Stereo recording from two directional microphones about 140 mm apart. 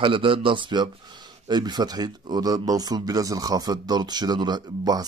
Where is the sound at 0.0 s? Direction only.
40° right (ahead or behind).